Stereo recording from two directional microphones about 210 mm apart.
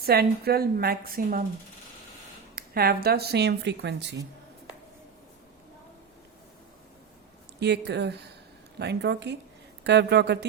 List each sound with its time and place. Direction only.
0.0 s speech: 50° right (ahead or behind)
2.6 s speech: 45° right (ahead or behind)
7.6 s speech: 55° right (ahead or behind)